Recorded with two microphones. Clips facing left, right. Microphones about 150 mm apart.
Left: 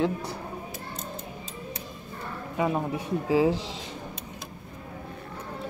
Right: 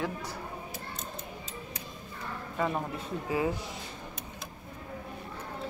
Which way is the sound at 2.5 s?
10° left (ahead or behind).